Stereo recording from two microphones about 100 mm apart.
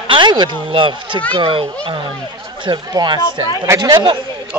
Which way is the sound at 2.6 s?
45° right (ahead or behind).